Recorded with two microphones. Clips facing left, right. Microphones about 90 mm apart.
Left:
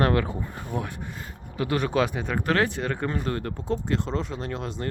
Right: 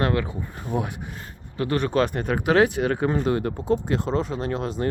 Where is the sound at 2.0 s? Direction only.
Centre (ahead or behind).